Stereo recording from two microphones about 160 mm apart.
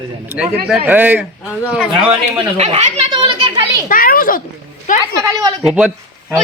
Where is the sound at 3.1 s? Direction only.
30° right (ahead or behind).